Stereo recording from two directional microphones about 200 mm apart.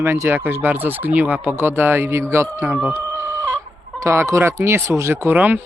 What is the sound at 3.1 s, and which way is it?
Chicken, 15° right (ahead or behind).